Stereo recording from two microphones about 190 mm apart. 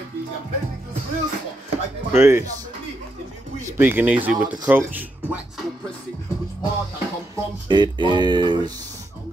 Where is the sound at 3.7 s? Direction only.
10° right (ahead or behind).